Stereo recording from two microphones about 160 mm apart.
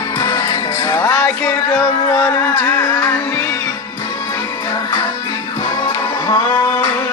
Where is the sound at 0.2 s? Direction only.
25° left (ahead or behind).